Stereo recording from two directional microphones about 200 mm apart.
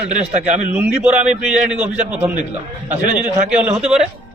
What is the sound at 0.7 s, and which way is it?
A man's voice, 10° right (ahead or behind).